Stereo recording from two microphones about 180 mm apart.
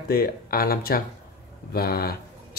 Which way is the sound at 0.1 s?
55° left (ahead or behind).